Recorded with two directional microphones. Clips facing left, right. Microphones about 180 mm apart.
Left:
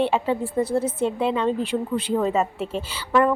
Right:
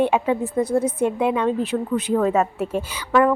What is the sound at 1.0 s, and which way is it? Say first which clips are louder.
A woman's voice: right 2 dB; 15° right (ahead or behind).